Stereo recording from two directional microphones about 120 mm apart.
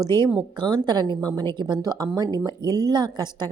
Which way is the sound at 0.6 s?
35° right (ahead or behind).